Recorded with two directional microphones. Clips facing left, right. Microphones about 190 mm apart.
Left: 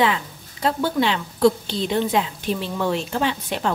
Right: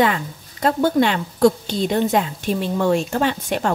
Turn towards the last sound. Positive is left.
turn(degrees=-50)  # may be behind; listen again after turning